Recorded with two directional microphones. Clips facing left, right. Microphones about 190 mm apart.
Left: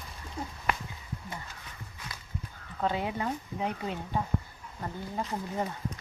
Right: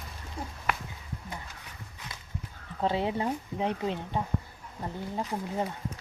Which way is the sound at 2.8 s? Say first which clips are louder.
Right 2 dB; 30° right (ahead or behind).